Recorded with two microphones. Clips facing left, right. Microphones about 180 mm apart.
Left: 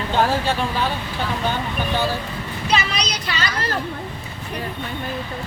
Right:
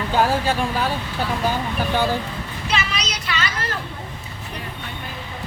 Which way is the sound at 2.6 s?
35° left (ahead or behind).